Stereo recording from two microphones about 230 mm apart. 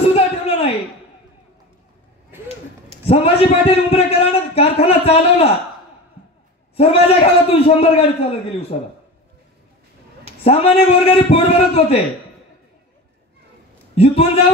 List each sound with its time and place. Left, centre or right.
0.0 s a sound: left
3.1 s a man's voice: left
6.8 s a man's voice: left
10.4 s a man's voice: left
13.9 s a man's voice: left